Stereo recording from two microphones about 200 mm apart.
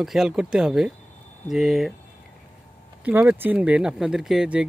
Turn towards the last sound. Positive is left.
turn(degrees=-5)  # may be behind; listen again after turning